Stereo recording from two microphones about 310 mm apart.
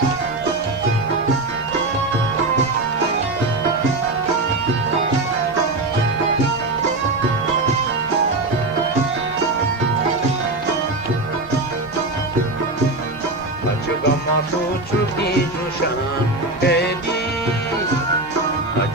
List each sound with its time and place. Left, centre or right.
16.6 s music: left